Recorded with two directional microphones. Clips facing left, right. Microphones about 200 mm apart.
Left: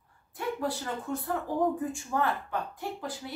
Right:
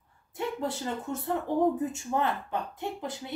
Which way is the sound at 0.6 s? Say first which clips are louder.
Right 1 dB; 25° right (ahead or behind).